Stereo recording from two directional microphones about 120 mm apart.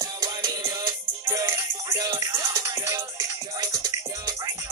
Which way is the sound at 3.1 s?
35° right (ahead or behind).